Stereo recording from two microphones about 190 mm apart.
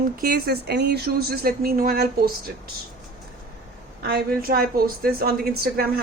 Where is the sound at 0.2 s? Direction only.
55° right (ahead or behind).